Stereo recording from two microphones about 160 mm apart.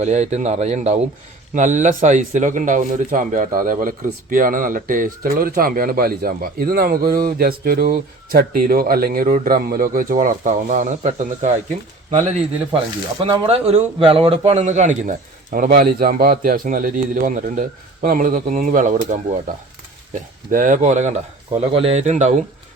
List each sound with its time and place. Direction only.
0.0 s a man's voice: 45° right (ahead or behind)
13.5 s a man's voice: 40° right (ahead or behind)
20.5 s a man's voice: 55° right (ahead or behind)
21.5 s a man's voice: 35° right (ahead or behind)